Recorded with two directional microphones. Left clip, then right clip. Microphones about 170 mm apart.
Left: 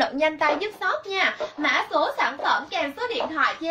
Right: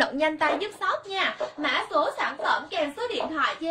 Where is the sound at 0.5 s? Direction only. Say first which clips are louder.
Left 2 dB; 15° right (ahead or behind).